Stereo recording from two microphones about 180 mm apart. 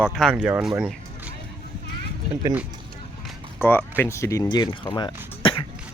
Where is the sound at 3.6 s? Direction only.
10° left (ahead or behind); by 5.6 s 25° left (ahead or behind).